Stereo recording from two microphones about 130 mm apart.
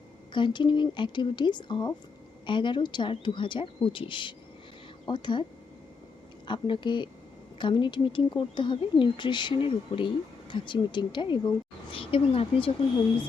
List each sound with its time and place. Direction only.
0.3 s speech: 35° left (ahead or behind)
6.5 s speech: 40° left (ahead or behind)